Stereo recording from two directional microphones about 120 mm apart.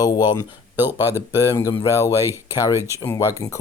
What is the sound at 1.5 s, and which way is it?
Speech, 25° left (ahead or behind).